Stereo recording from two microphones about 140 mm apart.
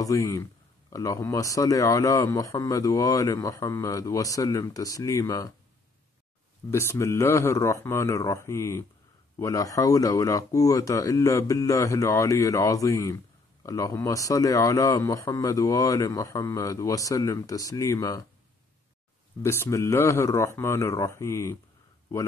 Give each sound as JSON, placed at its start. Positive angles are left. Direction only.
{"t": 0.0, "sound": "speech", "side_deg": 25}
{"t": 6.7, "sound": "speech", "side_deg": 20}
{"t": 19.4, "sound": "speech", "side_deg": 20}